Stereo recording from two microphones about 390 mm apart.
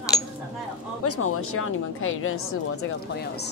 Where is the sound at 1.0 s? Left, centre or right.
Left.